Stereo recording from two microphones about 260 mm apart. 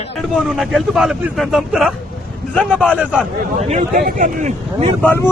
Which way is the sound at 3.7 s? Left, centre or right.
Right.